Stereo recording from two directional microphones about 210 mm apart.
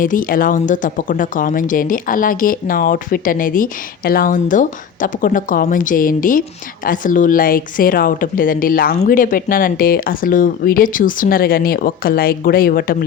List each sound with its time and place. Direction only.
0.0 s a woman's voice: 40° left (ahead or behind)